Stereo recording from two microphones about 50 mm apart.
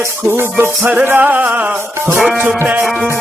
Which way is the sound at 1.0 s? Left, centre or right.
Right.